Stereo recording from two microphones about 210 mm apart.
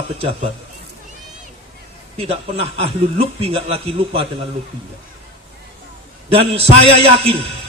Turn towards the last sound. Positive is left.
turn(degrees=-30)  # may be behind; listen again after turning